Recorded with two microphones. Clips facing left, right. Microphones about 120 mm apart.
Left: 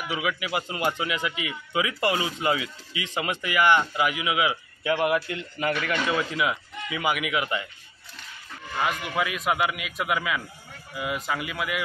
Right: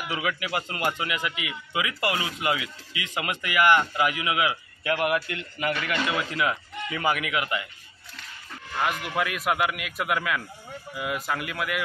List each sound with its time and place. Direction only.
0.1 s speech: 15° left (ahead or behind)
8.7 s a man's voice: centre (ahead or behind)